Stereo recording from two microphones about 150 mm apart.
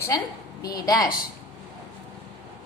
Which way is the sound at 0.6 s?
25° left (ahead or behind).